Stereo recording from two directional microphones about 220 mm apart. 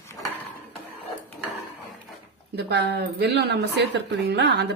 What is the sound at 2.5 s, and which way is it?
Speech, 50° right (ahead or behind).